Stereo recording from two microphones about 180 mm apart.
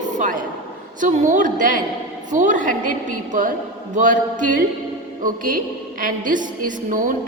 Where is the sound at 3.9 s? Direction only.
45° right (ahead or behind).